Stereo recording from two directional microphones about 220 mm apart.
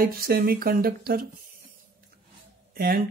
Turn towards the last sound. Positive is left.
turn(degrees=-45)  # may be behind; listen again after turning